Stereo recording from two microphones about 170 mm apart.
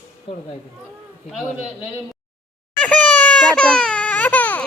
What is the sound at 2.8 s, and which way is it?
Baby cry, 10° left (ahead or behind).